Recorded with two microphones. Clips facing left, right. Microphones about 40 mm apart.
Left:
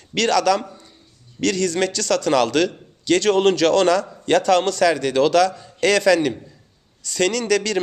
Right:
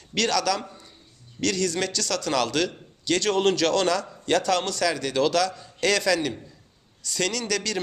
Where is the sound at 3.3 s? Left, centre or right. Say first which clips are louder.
Left 5 dB; left.